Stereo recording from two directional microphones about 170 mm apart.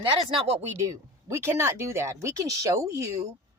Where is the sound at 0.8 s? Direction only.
15° right (ahead or behind).